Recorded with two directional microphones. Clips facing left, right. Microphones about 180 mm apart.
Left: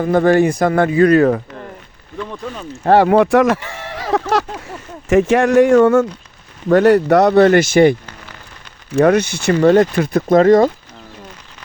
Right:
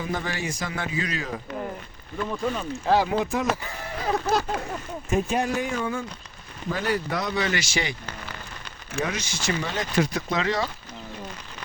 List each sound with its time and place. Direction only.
0.0 s speech: 55° left (ahead or behind)
2.8 s speech: 65° left (ahead or behind)
9.0 s speech: 60° left (ahead or behind)